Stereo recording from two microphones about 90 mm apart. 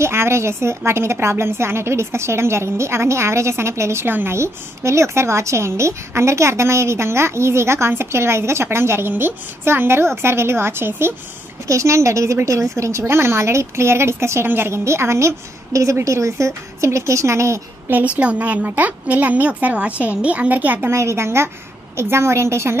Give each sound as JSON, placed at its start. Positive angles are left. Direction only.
{"t": 0.0, "sound": "a woman's voice", "side_deg": -30}
{"t": 17.9, "sound": "a woman's voice", "side_deg": -15}
{"t": 20.9, "sound": "a woman's voice", "side_deg": -30}